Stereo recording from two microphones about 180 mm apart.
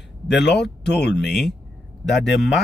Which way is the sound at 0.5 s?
70° left (ahead or behind).